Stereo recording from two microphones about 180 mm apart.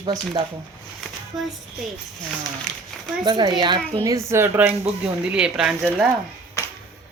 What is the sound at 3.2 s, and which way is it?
Speech, 25° right (ahead or behind).